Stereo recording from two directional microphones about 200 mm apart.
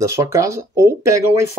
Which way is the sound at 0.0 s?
15° right (ahead or behind).